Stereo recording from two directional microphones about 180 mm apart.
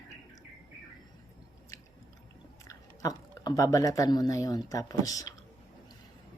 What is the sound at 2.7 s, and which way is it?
Speech, 20° left (ahead or behind).